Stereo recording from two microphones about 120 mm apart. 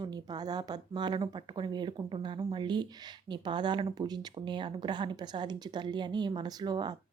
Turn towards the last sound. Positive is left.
turn(degrees=-35)  # may be behind; listen again after turning